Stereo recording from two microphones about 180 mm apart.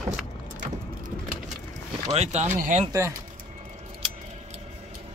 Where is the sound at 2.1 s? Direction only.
40° right (ahead or behind).